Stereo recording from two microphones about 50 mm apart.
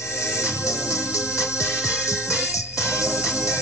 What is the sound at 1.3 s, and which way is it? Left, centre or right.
Music, left.